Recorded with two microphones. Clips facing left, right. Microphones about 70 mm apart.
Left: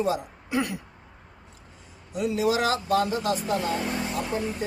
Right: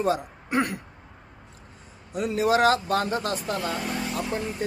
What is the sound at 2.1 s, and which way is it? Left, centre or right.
Speech, right.